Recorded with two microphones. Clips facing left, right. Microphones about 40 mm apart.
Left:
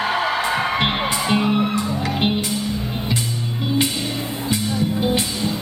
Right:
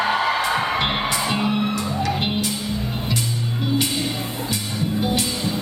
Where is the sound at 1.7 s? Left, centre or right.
Left.